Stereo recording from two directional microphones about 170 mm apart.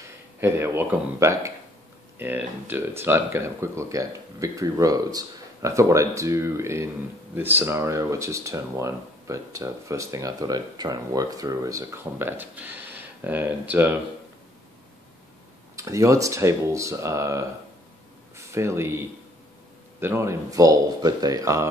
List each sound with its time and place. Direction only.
0.4 s speech: 15° right (ahead or behind)
15.7 s speech: 20° right (ahead or behind)